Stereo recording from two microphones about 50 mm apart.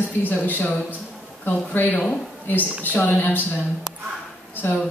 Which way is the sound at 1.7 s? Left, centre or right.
Left.